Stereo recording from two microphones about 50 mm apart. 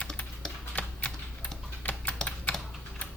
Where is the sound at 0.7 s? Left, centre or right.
Left.